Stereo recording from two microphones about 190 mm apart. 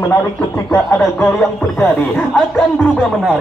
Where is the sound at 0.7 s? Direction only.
15° left (ahead or behind).